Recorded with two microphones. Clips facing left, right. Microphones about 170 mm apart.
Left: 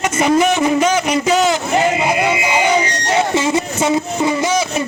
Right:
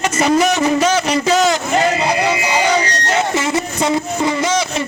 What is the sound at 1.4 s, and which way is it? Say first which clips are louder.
Music: even; 15° left (ahead or behind).